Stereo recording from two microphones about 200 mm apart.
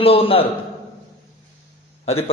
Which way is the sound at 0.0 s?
30° left (ahead or behind).